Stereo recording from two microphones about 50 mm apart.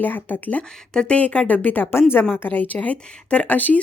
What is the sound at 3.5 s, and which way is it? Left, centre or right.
Speech, left.